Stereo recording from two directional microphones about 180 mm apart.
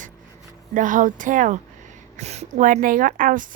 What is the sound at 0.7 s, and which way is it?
A woman's voice, 45° right (ahead or behind).